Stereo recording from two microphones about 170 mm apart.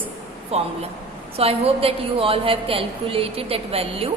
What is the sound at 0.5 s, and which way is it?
A woman's voice, 40° right (ahead or behind).